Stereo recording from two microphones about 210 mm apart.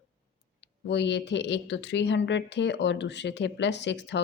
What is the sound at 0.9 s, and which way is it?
Speech, 55° left (ahead or behind).